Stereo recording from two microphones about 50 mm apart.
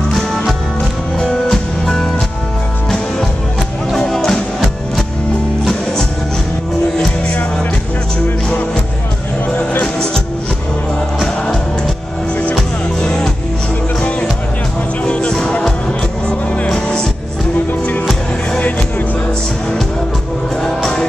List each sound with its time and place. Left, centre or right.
1.1 s music: centre
4.1 s music: centre
13.0 s music: centre